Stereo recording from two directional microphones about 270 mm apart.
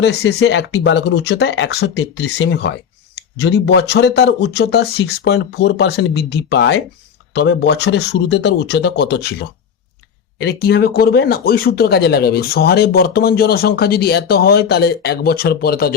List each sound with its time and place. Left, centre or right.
0.0 s speech: left